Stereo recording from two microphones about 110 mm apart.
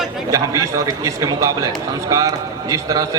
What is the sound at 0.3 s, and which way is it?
A man's voice, 30° right (ahead or behind).